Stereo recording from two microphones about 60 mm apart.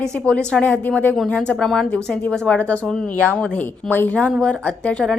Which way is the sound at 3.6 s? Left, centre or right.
Left.